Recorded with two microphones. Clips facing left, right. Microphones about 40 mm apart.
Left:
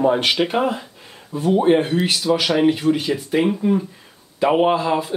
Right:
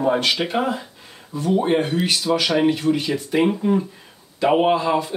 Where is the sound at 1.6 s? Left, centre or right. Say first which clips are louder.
Left 3 dB; centre.